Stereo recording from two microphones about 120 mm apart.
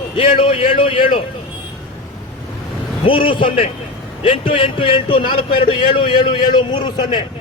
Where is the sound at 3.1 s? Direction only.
45° left (ahead or behind).